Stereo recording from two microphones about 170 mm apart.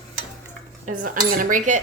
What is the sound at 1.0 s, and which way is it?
Speech, 50° right (ahead or behind).